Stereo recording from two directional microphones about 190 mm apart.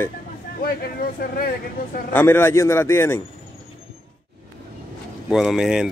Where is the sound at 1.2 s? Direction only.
55° left (ahead or behind).